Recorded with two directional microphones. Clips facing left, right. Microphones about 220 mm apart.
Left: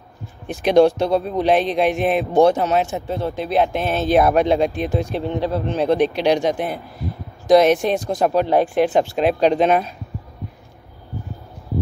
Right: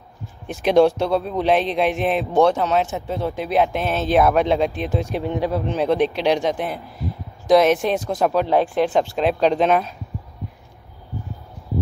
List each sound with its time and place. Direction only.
0.5 s speech: 5° right (ahead or behind)
2.3 s speech: 45° left (ahead or behind)
2.7 s speech: centre (ahead or behind)
5.1 s speech: 10° right (ahead or behind)
5.9 s speech: centre (ahead or behind)